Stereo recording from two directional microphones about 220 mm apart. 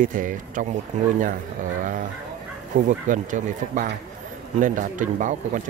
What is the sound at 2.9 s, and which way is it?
Speech, 35° right (ahead or behind).